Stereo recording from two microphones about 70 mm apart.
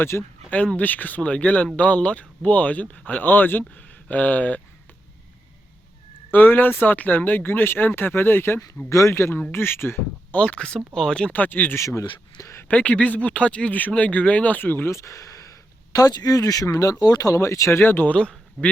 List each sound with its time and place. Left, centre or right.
0.0 s speech: left
0.8 s speech: left
6.3 s speech: left
8.9 s speech: left
9.1 s speech: left
10.3 s speech: centre
10.8 s speech: centre
11.1 s speech: centre
11.8 s speech: left
12.7 s speech: centre
14.8 s speech: left; by 18.7 s centre